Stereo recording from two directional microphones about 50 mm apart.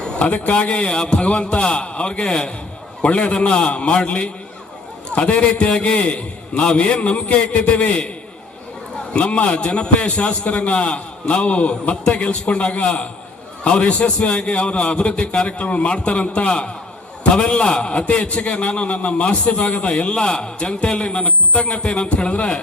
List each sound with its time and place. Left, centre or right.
0.3 s a man's voice: left
9.1 s a man's voice: left